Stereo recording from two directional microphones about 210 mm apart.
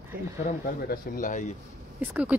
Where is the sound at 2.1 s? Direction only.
5° right (ahead or behind).